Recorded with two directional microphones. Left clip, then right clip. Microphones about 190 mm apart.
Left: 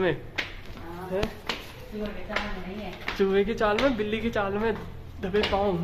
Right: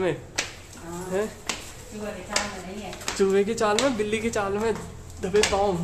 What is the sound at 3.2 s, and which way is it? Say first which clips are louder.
Speech: right 2 dB; 10° right (ahead or behind).